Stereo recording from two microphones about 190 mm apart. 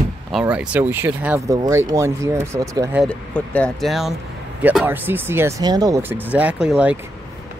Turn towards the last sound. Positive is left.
turn(degrees=-5)  # may be behind; listen again after turning